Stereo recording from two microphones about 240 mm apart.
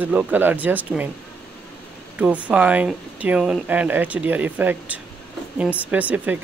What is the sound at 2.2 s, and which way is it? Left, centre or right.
Speech, centre.